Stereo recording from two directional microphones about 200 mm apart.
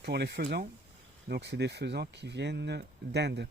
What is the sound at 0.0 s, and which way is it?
Speech, 55° right (ahead or behind).